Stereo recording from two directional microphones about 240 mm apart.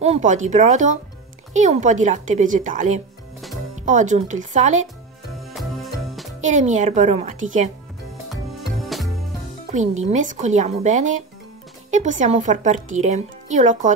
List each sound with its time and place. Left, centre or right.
0.0 s speech: right
5.5 s music: centre
6.4 s speech: right
8.8 s music: centre
9.7 s speech: right